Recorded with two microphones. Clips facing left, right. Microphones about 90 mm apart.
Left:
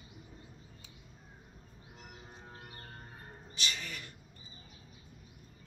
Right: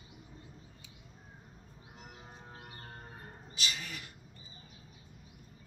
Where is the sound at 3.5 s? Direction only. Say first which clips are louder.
Even; 5° right (ahead or behind).